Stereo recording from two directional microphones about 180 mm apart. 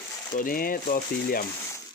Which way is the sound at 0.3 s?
50° left (ahead or behind).